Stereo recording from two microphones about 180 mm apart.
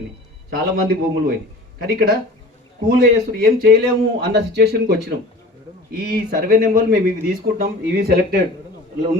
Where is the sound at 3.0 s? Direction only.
55° right (ahead or behind).